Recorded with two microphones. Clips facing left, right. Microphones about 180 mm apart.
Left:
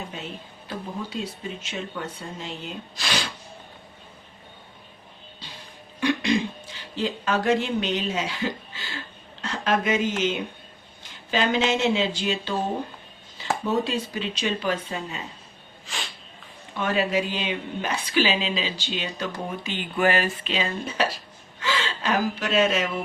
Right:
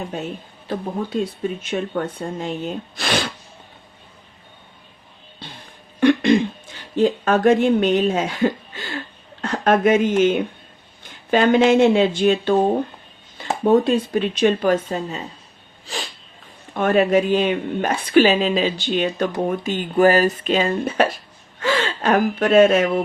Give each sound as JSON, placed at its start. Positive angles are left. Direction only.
{"t": 0.1, "sound": "a woman's voice", "side_deg": -50}
{"t": 1.6, "sound": "a woman's voice", "side_deg": -55}
{"t": 5.4, "sound": "music", "side_deg": -55}
{"t": 6.0, "sound": "a sound", "side_deg": -55}
{"t": 9.4, "sound": "a woman's voice", "side_deg": -50}
{"t": 13.7, "sound": "a woman's voice", "side_deg": -55}
{"t": 16.7, "sound": "a woman's voice", "side_deg": -50}